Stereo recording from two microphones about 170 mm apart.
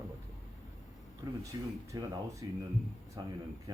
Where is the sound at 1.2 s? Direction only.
25° right (ahead or behind).